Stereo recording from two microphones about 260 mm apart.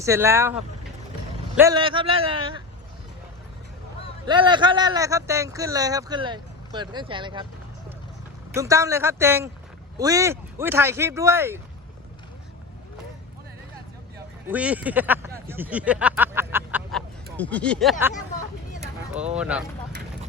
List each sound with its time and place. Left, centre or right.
0.0 s a man's voice: centre
4.3 s a man's voice: centre
8.5 s a man's voice: centre
14.4 s speech: centre
18.1 s hubbub: left
19.1 s speech: centre